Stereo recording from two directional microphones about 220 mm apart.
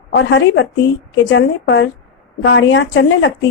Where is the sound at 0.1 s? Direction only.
55° left (ahead or behind).